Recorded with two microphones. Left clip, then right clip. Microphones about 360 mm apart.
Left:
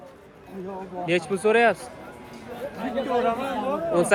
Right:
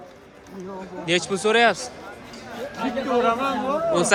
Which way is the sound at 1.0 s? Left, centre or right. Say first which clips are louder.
Right 1 dB; centre.